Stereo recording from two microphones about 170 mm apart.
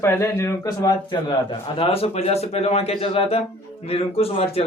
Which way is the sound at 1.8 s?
35° left (ahead or behind).